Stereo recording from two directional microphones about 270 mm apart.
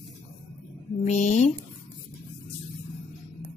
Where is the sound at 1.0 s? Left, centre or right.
Left.